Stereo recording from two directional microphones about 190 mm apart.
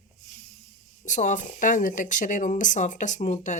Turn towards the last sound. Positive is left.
turn(degrees=40)  # may be behind; listen again after turning